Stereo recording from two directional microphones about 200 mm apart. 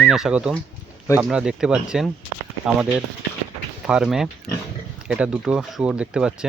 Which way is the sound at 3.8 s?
5° right (ahead or behind).